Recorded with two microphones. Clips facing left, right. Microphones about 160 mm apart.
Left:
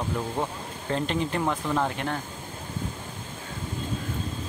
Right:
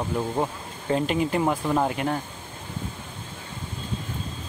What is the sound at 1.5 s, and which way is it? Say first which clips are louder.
Speech: right 3 dB; 20° right (ahead or behind).